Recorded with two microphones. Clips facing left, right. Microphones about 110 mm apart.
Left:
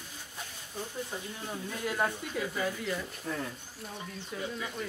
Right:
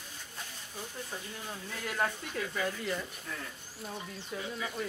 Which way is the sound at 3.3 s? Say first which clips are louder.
Left 10 dB; 30° left (ahead or behind).